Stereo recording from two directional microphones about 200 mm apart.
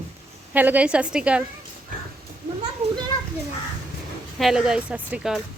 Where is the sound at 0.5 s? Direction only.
10° right (ahead or behind).